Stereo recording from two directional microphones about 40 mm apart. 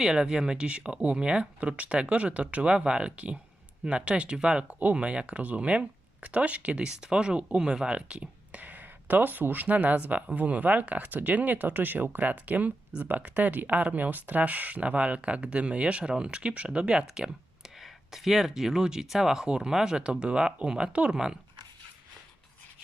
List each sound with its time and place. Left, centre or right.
0.0 s speech: centre
4.7 s speech: right
6.8 s speech: right
17.2 s a sound: centre
17.7 s speech: centre; by 21.2 s right